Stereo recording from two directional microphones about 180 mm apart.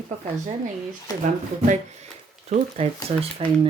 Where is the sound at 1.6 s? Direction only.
40° right (ahead or behind).